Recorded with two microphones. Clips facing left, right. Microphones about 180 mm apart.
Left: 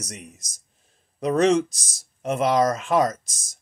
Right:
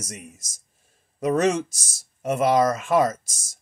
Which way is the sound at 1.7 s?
50° right (ahead or behind).